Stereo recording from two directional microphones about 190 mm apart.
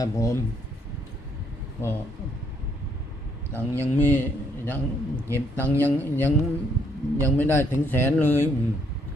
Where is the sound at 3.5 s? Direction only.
10° left (ahead or behind).